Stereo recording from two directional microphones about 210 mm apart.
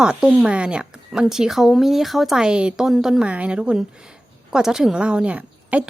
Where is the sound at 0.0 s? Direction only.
5° right (ahead or behind).